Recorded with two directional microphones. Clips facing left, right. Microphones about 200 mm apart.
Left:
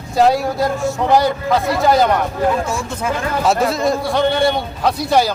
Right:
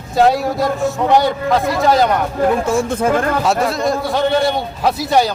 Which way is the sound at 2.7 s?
50° right (ahead or behind).